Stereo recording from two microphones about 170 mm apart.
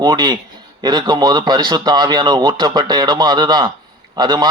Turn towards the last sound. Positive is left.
turn(degrees=-25)  # may be behind; listen again after turning